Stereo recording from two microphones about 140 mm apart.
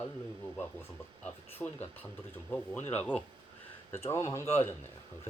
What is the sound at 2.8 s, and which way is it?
Speech, 50° left (ahead or behind).